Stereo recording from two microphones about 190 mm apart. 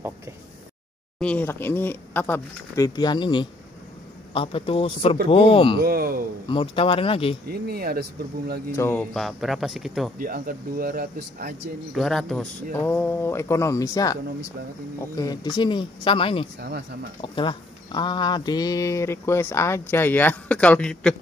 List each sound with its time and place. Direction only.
1.2 s speech: 10° left (ahead or behind); by 5.8 s 30° left (ahead or behind)
5.8 s speech: 50° right (ahead or behind)
6.4 s speech: 25° left (ahead or behind)
7.4 s speech: 55° right (ahead or behind)
8.7 s speech: 10° left (ahead or behind)
9.1 s speech: centre (ahead or behind)
10.1 s speech: 50° right (ahead or behind)
11.9 s speech: centre (ahead or behind); by 16.4 s 30° left (ahead or behind)
16.5 s speech: 60° right (ahead or behind)
17.2 s speech: 25° left (ahead or behind); by 21.2 s 5° left (ahead or behind)